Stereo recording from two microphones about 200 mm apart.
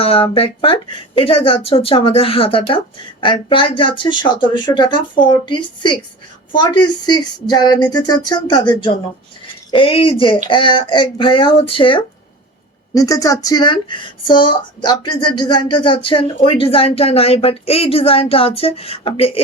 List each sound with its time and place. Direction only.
0.0 s a woman's voice: 30° left (ahead or behind)